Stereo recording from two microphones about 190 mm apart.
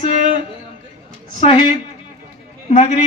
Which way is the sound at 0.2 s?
45° right (ahead or behind).